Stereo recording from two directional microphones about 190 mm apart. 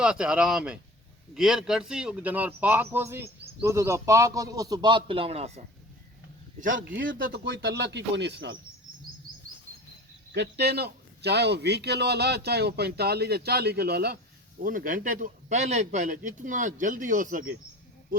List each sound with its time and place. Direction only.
0.0 s speech: 5° right (ahead or behind); by 5.6 s 35° right (ahead or behind)
6.6 s a man's voice: 45° right (ahead or behind)
7.3 s a man's voice: 65° right (ahead or behind)
10.3 s a man's voice: 60° right (ahead or behind); by 17.4 s 45° right (ahead or behind)